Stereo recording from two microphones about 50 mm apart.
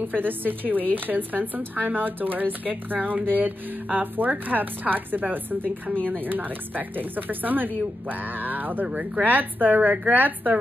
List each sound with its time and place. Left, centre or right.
0.1 s speech: right
8.8 s speech: right
9.2 s speech: right